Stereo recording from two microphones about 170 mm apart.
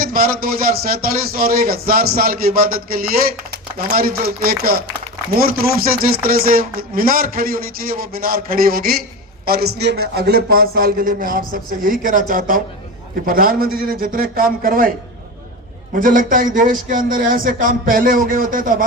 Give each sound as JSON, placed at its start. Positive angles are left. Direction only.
{"t": 0.0, "sound": "speech", "side_deg": -60}
{"t": 16.0, "sound": "speech", "side_deg": -55}